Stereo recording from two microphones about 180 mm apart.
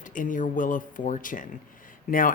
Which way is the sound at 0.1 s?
45° left (ahead or behind).